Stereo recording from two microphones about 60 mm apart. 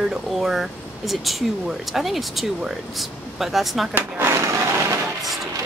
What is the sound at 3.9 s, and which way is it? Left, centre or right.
Speech, right.